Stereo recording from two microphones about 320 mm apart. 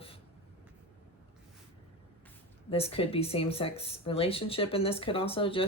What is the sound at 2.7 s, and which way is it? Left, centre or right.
Speech, centre.